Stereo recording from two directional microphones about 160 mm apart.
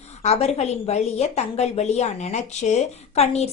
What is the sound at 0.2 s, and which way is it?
A woman's voice, 40° left (ahead or behind).